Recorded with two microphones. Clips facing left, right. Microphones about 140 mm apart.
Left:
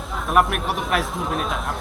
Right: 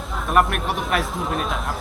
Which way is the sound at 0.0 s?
Centre (ahead or behind).